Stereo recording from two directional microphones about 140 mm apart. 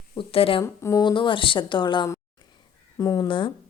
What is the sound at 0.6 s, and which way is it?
A woman's voice, 20° left (ahead or behind).